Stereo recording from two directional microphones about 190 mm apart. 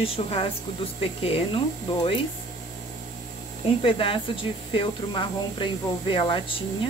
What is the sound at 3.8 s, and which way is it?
Speech, 30° left (ahead or behind).